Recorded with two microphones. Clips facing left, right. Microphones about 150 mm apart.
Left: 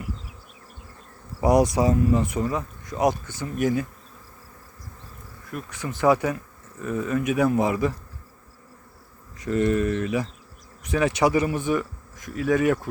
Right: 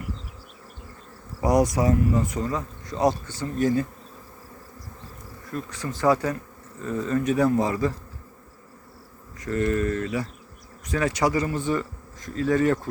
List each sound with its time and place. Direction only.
1.4 s speech: 25° left (ahead or behind)
5.5 s bee: 15° left (ahead or behind)
6.0 s speech: 15° left (ahead or behind)
9.4 s speech: 20° left (ahead or behind)